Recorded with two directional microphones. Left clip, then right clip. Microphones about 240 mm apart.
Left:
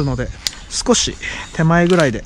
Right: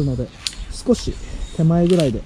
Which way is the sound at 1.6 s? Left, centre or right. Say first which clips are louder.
Left 5 dB; left.